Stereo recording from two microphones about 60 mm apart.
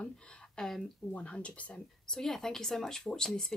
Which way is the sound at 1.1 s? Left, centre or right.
Left.